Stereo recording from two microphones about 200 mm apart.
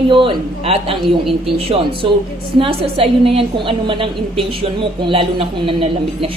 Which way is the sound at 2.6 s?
30° right (ahead or behind).